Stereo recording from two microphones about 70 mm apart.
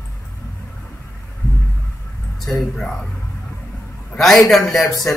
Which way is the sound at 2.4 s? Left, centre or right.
Centre.